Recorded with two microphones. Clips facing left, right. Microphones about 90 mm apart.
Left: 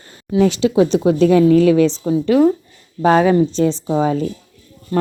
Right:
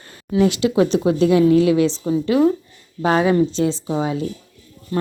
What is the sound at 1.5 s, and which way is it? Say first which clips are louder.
Speech: left 3 dB; 20° right (ahead or behind).